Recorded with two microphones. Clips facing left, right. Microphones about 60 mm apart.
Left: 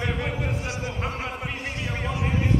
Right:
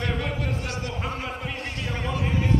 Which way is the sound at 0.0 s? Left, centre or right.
Centre.